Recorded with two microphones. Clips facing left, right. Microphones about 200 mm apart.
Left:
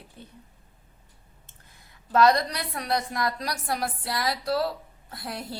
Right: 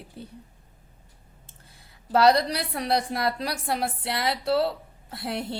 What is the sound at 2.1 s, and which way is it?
A woman's voice, 30° right (ahead or behind).